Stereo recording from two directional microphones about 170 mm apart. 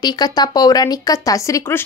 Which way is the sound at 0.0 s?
25° left (ahead or behind).